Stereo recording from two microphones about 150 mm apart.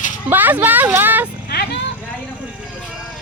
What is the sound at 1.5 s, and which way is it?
Vehicle, 90° left.